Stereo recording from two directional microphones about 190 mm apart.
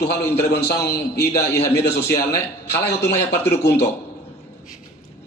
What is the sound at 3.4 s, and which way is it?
Speech, 10° left (ahead or behind).